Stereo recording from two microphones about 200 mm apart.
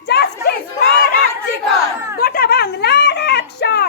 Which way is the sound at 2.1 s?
50° left (ahead or behind).